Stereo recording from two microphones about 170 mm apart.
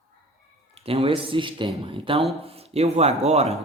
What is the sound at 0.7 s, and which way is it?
Speech, 35° right (ahead or behind).